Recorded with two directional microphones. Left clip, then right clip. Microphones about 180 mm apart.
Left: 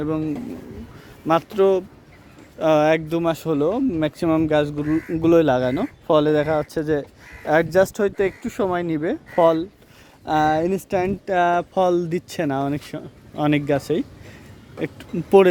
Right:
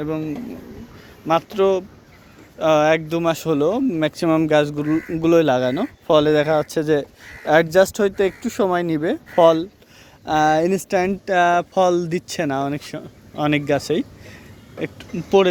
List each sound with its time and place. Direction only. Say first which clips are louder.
0.0 s speech: left 1 dB; 25° left (ahead or behind); by 5.0 s centre (ahead or behind)
5.1 s speech: even; 20° left (ahead or behind)
14.8 s speech: even; 30° left (ahead or behind)